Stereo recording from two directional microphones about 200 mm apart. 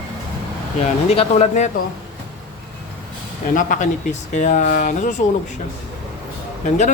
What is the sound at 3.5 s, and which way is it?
A man's voice, 40° left (ahead or behind).